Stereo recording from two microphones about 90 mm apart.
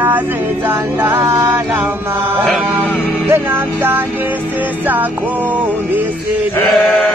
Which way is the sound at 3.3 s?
25° right (ahead or behind).